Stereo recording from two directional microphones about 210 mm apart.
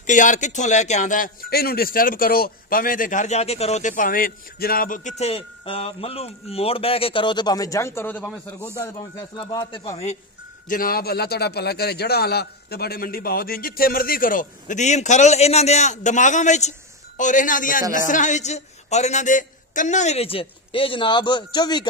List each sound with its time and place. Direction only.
0.0 s a man's voice: 35° left (ahead or behind)
10.7 s a man's voice: 45° left (ahead or behind); by 21.8 s 20° left (ahead or behind)